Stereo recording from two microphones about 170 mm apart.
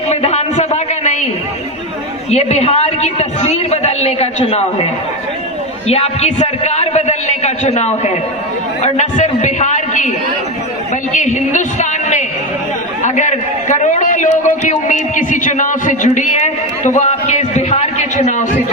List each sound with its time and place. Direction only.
0.1 s a sound: 40° left (ahead or behind)
2.3 s a man's voice: 40° left (ahead or behind)
5.9 s a man's voice: 40° left (ahead or behind)
11.1 s a man's voice: 45° left (ahead or behind)